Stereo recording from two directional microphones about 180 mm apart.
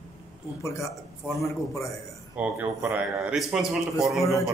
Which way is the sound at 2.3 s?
10° right (ahead or behind).